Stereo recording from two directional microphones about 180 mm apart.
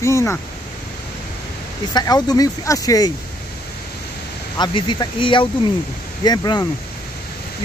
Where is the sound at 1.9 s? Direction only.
20° left (ahead or behind).